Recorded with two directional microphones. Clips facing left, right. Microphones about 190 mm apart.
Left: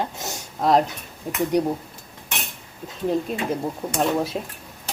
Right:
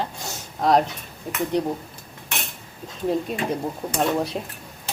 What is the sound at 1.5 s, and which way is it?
Speech, 10° left (ahead or behind).